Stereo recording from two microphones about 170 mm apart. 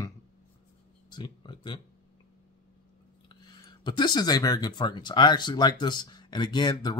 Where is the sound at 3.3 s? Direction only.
25° left (ahead or behind).